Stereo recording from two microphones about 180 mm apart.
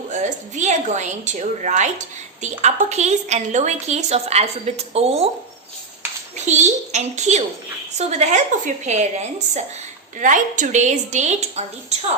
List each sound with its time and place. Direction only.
0.1 s a woman's voice: 40° right (ahead or behind)
6.3 s a woman's voice: 40° right (ahead or behind)